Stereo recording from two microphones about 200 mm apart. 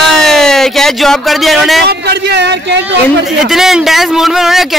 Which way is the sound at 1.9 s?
55° right (ahead or behind).